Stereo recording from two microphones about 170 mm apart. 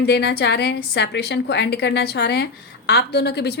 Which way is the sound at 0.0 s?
75° left (ahead or behind).